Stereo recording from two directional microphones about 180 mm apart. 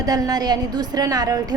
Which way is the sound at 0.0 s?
20° right (ahead or behind).